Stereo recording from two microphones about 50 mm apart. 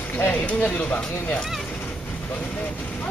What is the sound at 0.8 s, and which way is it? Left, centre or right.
Speech, left.